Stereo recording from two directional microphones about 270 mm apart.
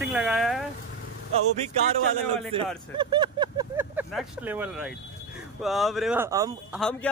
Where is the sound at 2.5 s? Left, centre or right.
Centre.